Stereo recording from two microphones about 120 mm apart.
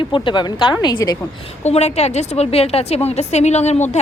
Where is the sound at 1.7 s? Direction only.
65° left (ahead or behind).